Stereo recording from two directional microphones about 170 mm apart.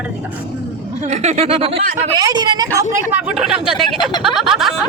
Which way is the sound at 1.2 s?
40° right (ahead or behind).